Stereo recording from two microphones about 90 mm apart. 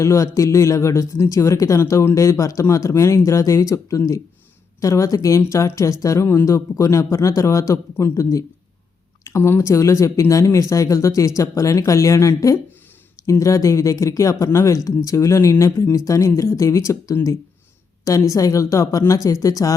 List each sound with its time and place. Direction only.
0.0 s speech: 35° left (ahead or behind)